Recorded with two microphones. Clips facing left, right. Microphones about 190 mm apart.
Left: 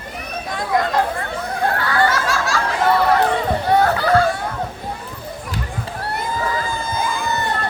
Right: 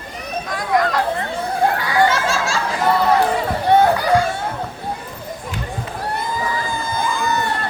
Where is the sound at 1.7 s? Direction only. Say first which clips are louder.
Right 2 dB; 15° right (ahead or behind).